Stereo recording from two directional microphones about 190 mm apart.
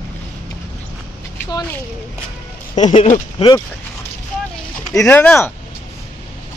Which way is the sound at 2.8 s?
30° left (ahead or behind).